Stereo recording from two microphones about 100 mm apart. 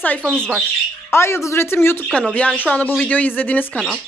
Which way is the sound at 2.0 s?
10° left (ahead or behind).